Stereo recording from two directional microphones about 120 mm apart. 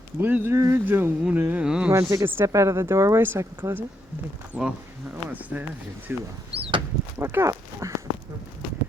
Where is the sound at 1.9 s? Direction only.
25° right (ahead or behind).